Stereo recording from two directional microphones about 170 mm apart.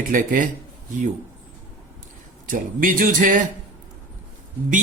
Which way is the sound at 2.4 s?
55° right (ahead or behind).